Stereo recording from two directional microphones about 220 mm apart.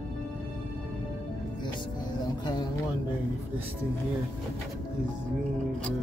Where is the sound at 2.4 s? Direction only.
15° left (ahead or behind).